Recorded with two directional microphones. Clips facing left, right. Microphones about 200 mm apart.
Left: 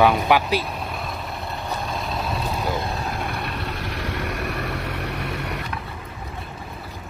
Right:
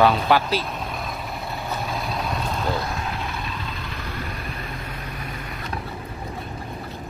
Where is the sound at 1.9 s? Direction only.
Centre (ahead or behind).